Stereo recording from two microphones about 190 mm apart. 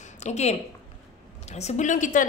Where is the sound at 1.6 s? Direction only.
35° left (ahead or behind).